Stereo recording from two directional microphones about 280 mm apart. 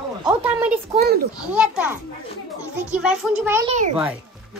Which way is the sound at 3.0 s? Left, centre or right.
Centre.